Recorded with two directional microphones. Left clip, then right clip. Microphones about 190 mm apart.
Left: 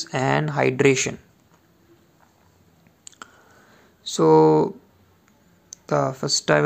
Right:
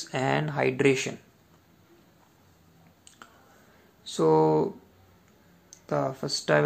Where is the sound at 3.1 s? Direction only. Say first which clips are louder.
Left 10 dB; 35° left (ahead or behind).